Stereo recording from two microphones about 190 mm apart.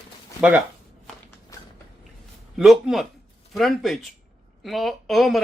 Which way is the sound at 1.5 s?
15° left (ahead or behind).